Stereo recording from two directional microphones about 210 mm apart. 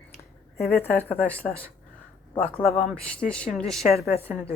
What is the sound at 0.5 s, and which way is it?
Speech, 45° left (ahead or behind).